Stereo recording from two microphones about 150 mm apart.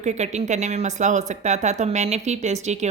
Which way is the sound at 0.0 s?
50° right (ahead or behind).